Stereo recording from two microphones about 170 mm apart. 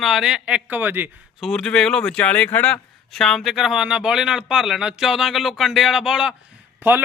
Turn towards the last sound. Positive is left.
turn(degrees=-10)  # may be behind; listen again after turning